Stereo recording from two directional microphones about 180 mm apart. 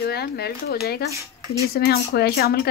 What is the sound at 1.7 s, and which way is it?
Speech, 60° left (ahead or behind).